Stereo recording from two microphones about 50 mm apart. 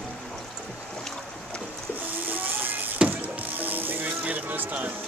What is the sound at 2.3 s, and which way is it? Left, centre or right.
Music, right.